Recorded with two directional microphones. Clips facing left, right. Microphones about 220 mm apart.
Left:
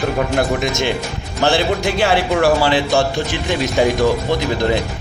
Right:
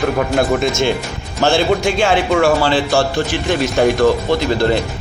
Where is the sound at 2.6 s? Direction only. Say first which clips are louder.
Right 1 dB; 15° left (ahead or behind).